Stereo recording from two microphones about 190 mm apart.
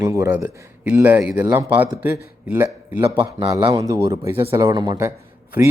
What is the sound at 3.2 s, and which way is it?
Speech, 25° right (ahead or behind).